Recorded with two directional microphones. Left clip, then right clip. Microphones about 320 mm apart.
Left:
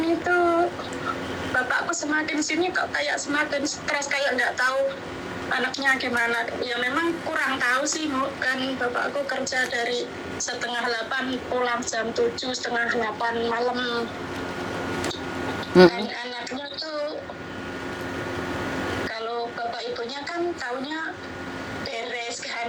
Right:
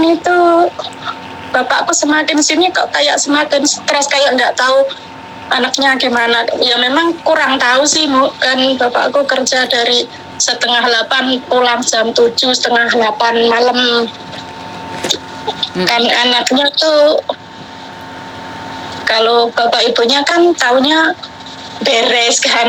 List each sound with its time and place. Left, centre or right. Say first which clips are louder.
0.3 s a sound: right 11 dB; right
1.5 s a woman's voice: right 13 dB; right
15.9 s speech: right 19 dB; right
19.0 s speech: right 19 dB; right